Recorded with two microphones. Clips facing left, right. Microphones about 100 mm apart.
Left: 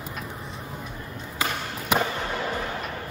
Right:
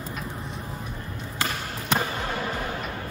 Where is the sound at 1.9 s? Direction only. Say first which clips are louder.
Left 2 dB; 10° left (ahead or behind).